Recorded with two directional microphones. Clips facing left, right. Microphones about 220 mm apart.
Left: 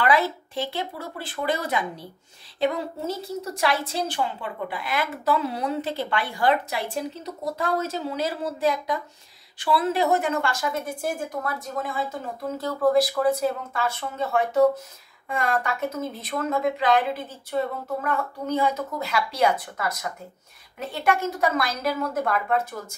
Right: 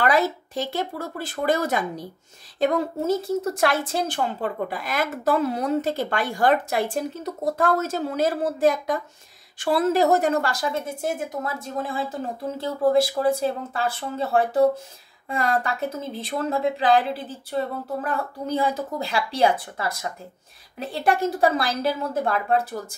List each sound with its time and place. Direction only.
0.0 s a woman's voice: 45° right (ahead or behind)
10.9 s a woman's voice: 20° right (ahead or behind)